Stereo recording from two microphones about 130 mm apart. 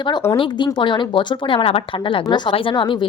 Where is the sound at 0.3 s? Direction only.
40° left (ahead or behind).